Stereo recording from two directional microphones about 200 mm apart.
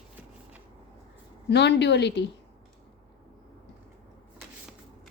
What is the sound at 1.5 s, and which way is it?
Speech, 60° left (ahead or behind).